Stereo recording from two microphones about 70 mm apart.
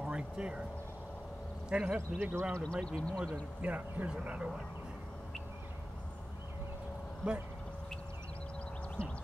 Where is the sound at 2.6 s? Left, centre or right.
Centre.